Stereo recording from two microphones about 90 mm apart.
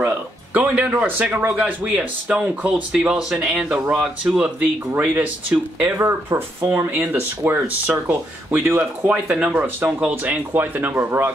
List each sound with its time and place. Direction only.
0.6 s speech: 15° right (ahead or behind)